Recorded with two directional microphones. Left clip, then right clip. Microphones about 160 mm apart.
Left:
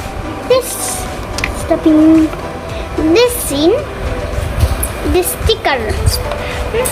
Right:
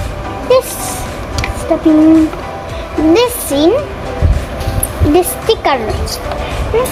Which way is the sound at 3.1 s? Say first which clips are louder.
Even; 20° right (ahead or behind).